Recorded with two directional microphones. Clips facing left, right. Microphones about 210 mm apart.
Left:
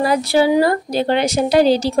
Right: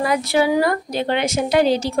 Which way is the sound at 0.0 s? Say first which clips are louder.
Left 3 dB; 35° left (ahead or behind).